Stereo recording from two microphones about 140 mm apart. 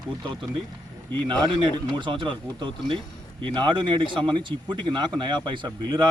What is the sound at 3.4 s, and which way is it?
Speech, 35° right (ahead or behind).